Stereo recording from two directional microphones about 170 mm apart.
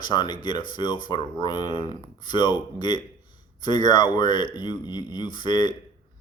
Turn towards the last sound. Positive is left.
turn(degrees=25)  # may be behind; listen again after turning